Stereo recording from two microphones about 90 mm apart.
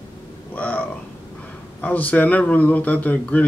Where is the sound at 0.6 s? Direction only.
15° left (ahead or behind).